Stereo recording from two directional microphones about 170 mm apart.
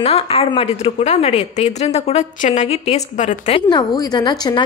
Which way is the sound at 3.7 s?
25° left (ahead or behind).